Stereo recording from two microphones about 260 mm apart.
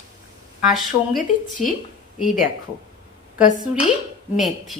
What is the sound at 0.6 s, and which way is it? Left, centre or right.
Speech, centre.